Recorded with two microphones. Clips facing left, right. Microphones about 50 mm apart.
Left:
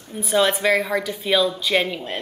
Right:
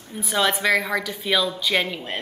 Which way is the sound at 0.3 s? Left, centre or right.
Centre.